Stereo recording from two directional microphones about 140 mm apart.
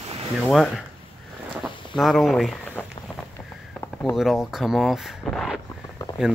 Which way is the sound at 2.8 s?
10° left (ahead or behind).